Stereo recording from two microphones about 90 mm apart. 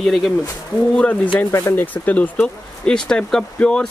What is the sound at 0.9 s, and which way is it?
Speech, 15° left (ahead or behind).